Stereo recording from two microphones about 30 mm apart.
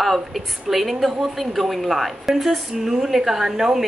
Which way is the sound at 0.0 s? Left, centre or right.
Centre.